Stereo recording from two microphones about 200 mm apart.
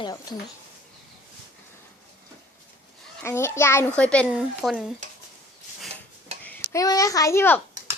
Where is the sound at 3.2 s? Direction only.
15° left (ahead or behind).